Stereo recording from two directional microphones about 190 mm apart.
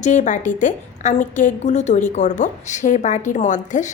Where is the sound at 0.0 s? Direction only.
40° left (ahead or behind).